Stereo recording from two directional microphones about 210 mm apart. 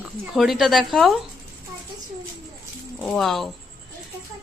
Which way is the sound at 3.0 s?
Centre (ahead or behind).